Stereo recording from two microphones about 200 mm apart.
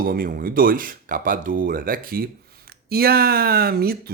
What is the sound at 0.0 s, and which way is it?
Speech, 45° right (ahead or behind).